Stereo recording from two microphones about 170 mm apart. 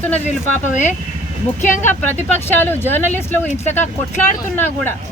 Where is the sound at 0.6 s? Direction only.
45° left (ahead or behind).